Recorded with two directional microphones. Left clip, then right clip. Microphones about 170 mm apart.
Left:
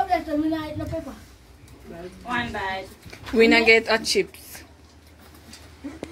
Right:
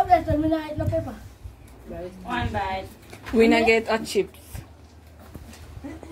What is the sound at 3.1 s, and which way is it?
Speech, 5° left (ahead or behind).